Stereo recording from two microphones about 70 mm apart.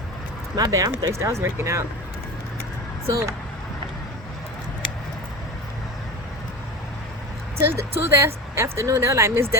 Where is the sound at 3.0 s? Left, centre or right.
Right.